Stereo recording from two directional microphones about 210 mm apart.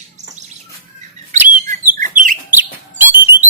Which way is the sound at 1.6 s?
40° right (ahead or behind).